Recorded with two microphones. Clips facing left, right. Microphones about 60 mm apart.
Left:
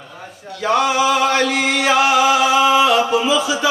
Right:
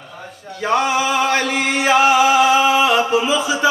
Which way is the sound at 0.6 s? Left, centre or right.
Right.